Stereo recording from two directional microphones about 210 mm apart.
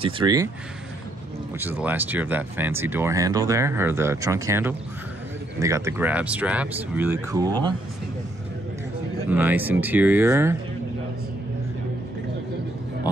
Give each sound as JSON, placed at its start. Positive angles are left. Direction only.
{"t": 0.0, "sound": "speech", "side_deg": -20}
{"t": 1.6, "sound": "speech", "side_deg": -10}
{"t": 9.3, "sound": "speech", "side_deg": -10}